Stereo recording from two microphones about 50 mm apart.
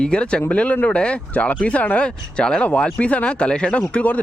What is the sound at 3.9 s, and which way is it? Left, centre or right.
Speech, left.